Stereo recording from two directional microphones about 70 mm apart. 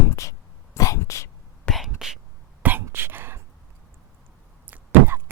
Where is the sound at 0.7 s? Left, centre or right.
Left.